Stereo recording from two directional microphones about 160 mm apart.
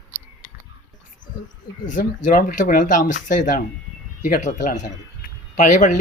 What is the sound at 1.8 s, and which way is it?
Speech, 55° left (ahead or behind).